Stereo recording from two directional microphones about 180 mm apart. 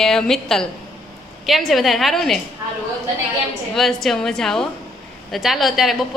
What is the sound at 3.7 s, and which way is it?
A woman's voice, centre (ahead or behind).